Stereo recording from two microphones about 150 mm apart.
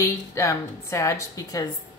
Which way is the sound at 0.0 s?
20° left (ahead or behind).